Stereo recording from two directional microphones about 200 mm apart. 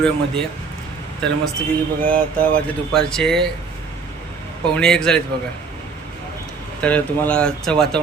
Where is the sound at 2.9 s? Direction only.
5° left (ahead or behind).